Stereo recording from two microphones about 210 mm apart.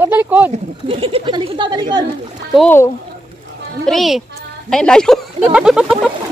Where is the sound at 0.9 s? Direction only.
25° right (ahead or behind).